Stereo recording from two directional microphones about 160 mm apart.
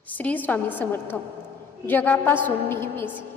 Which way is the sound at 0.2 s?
10° left (ahead or behind).